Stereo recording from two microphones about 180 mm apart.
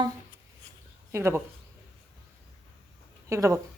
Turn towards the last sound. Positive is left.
turn(degrees=-15)  # may be behind; listen again after turning